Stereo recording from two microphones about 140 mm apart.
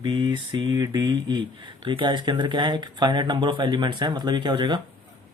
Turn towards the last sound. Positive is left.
turn(degrees=-35)  # may be behind; listen again after turning